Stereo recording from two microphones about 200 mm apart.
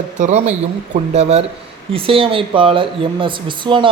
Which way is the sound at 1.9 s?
25° right (ahead or behind).